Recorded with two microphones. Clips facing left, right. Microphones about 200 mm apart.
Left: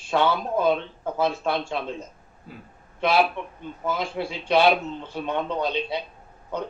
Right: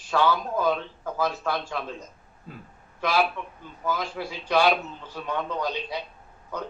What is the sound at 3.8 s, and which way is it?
Speech, 25° left (ahead or behind).